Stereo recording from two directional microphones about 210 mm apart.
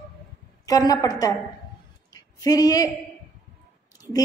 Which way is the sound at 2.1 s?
15° left (ahead or behind).